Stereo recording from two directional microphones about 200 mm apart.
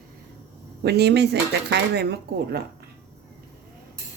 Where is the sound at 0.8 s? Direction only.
55° right (ahead or behind).